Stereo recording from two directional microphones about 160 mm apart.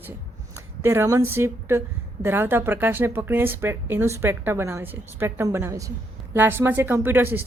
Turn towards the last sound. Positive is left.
turn(degrees=-15)  # may be behind; listen again after turning